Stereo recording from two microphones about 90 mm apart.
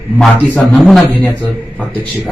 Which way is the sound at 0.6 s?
Centre (ahead or behind).